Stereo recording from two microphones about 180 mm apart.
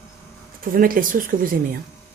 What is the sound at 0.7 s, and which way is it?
Speech, 50° right (ahead or behind).